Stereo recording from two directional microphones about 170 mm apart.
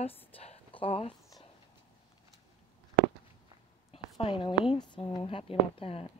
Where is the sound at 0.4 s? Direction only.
35° left (ahead or behind).